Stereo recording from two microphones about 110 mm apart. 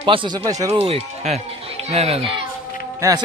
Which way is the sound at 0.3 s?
35° right (ahead or behind).